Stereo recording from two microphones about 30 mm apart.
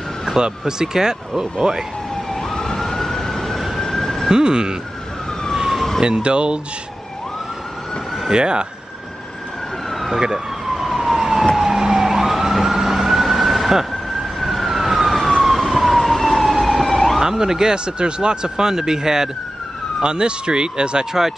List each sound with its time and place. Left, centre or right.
0.4 s speech: right
2.3 s emergency vehicle: centre
3.5 s vehicle: centre
3.8 s emergency vehicle: centre
4.3 s speech: right
6.0 s speech: right
8.3 s speech: right
9.8 s emergency vehicle: centre
11.1 s emergency vehicle: centre
17.2 s speech: centre
20.0 s speech: right